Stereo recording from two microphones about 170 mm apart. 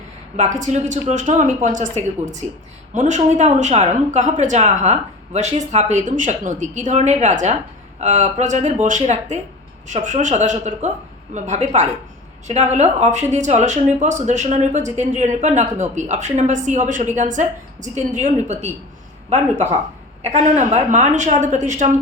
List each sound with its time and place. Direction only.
0.3 s a woman's voice: 45° right (ahead or behind)
20.2 s a woman's voice: 40° right (ahead or behind)